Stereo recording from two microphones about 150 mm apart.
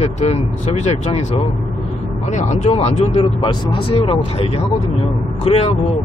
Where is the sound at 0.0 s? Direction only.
45° left (ahead or behind).